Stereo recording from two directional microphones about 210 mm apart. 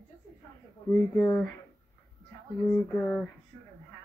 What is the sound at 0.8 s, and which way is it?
Speech, 10° left (ahead or behind).